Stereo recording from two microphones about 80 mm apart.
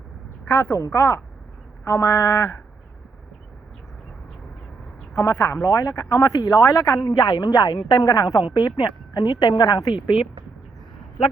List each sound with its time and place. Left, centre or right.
0.5 s speech: left
5.1 s speech: left
5.6 s speech: left
7.3 s speech: left
8.5 s speech: left